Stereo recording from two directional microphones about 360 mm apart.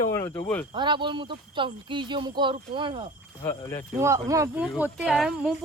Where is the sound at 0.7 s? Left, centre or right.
Centre.